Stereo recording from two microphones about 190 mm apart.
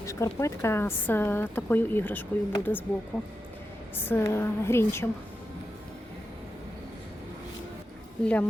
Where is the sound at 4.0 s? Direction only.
10° left (ahead or behind).